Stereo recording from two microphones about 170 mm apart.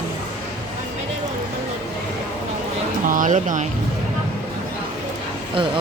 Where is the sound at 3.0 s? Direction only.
50° right (ahead or behind).